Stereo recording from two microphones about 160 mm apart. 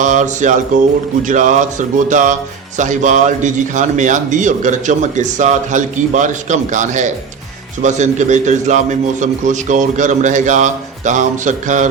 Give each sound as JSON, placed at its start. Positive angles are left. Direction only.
{"t": 0.0, "sound": "a man's voice", "side_deg": -50}